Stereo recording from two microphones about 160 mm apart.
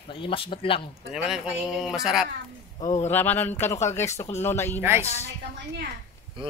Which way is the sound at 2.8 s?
45° left (ahead or behind).